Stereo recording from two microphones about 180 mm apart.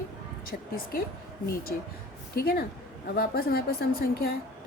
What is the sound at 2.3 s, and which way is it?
A woman's voice, 55° left (ahead or behind).